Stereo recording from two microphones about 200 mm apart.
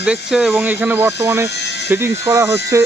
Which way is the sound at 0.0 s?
5° right (ahead or behind).